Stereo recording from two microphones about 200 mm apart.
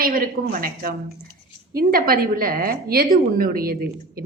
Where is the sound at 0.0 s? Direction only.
45° right (ahead or behind).